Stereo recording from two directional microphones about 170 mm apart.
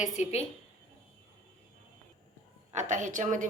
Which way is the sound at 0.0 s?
40° left (ahead or behind).